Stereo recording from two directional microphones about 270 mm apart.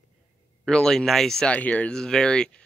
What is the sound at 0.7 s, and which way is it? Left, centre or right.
Speech, centre.